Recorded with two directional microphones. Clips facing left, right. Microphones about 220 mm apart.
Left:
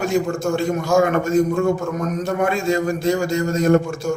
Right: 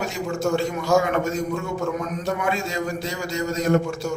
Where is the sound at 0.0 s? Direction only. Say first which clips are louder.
Left 5 dB; 50° left (ahead or behind).